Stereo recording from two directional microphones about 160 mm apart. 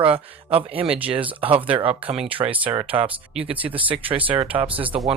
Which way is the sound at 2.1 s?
5° right (ahead or behind).